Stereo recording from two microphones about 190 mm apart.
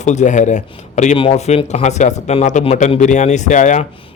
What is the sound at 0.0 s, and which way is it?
Speech, 40° left (ahead or behind).